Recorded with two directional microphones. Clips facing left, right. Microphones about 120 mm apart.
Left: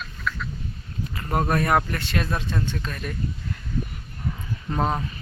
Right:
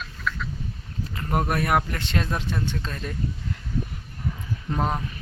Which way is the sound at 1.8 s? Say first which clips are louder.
Left 1 dB; 20° right (ahead or behind).